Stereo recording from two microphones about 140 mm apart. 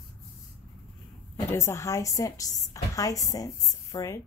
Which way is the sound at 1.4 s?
20° left (ahead or behind).